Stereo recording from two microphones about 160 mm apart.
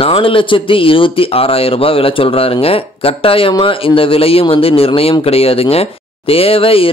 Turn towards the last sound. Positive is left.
turn(degrees=35)  # may be behind; listen again after turning